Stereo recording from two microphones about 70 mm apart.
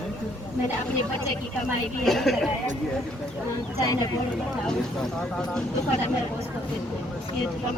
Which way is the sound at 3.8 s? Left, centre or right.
Left.